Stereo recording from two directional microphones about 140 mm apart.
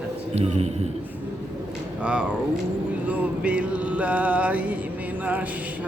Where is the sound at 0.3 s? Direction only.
50° right (ahead or behind).